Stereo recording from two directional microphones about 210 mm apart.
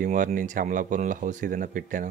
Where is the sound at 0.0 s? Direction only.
40° right (ahead or behind).